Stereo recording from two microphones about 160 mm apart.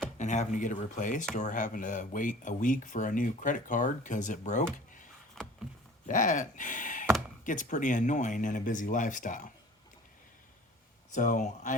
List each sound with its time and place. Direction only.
0.2 s speech: 50° left (ahead or behind)
5.4 s a sound: 5° left (ahead or behind)
6.1 s speech: 55° left (ahead or behind)
11.1 s speech: 55° left (ahead or behind)